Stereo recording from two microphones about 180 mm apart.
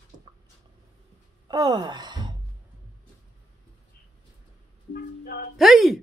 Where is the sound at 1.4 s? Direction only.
20° right (ahead or behind).